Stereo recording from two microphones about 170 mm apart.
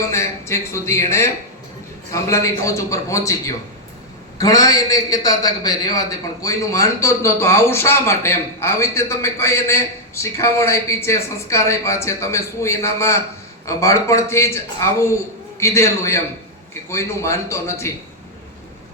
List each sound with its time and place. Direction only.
0.1 s a man's voice: 15° left (ahead or behind)